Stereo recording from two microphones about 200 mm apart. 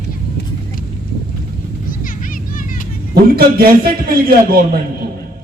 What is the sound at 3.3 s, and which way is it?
Speech, 50° right (ahead or behind).